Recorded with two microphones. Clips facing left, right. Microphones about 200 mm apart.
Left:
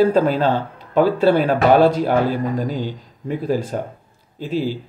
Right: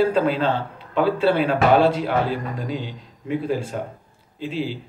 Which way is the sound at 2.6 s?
40° left (ahead or behind).